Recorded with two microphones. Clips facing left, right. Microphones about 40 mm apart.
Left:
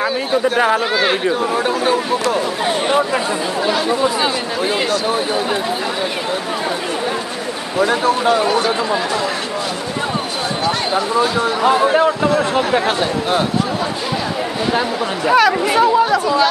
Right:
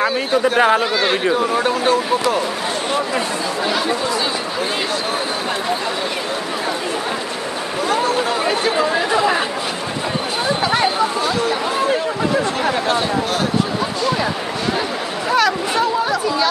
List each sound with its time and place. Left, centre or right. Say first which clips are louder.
0.0 s speech: even; centre
0.9 s speech: left 1 dB; centre
8.7 s speech: right 2 dB; centre
11.7 s speech: left 5 dB; left
15.2 s speech: left 4 dB; centre